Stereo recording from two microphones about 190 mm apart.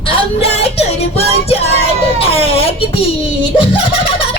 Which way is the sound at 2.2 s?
30° left (ahead or behind).